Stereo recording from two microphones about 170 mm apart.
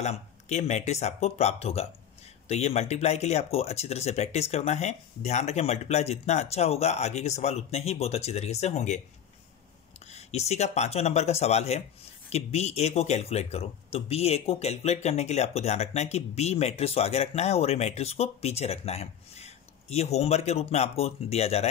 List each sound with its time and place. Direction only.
0.0 s speech: 40° left (ahead or behind)
10.1 s speech: 40° left (ahead or behind)